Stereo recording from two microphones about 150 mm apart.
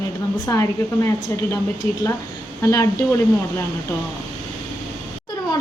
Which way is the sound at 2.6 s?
20° left (ahead or behind).